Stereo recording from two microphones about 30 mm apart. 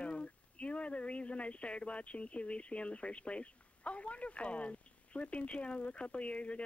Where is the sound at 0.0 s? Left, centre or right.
Left.